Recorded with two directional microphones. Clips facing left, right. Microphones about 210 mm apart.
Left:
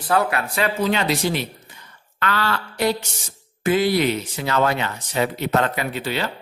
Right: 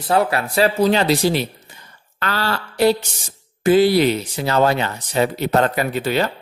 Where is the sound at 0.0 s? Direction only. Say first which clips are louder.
Right 3 dB; 25° right (ahead or behind).